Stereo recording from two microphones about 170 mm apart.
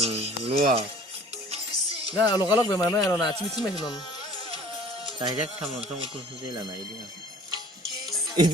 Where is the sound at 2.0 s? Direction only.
20° left (ahead or behind).